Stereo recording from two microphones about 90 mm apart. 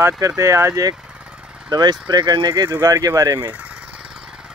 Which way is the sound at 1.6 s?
50° right (ahead or behind).